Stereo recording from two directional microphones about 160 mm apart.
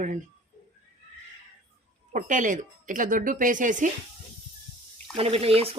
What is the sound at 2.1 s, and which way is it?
A woman's voice, 55° right (ahead or behind).